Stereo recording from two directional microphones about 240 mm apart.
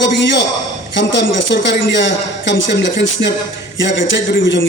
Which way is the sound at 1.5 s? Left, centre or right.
Left.